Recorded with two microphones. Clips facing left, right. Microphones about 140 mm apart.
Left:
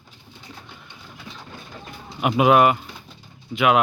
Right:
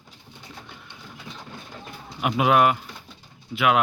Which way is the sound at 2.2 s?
5° left (ahead or behind).